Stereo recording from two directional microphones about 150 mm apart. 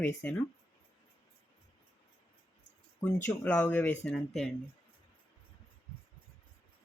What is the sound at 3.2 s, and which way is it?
Speech, 10° left (ahead or behind).